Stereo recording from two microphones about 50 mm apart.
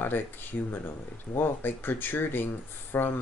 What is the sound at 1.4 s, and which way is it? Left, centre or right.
Speech, left.